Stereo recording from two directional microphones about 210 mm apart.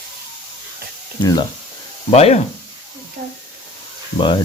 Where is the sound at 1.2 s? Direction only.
20° left (ahead or behind).